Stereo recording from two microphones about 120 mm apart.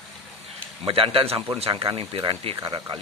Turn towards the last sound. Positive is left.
turn(degrees=-40)  # may be behind; listen again after turning